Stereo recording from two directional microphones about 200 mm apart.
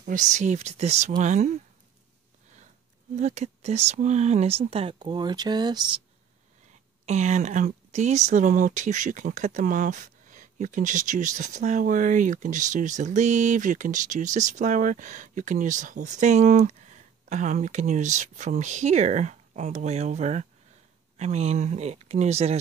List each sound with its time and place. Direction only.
0.0 s speech: 40° right (ahead or behind)
3.2 s speech: 35° right (ahead or behind)
7.1 s speech: 35° right (ahead or behind)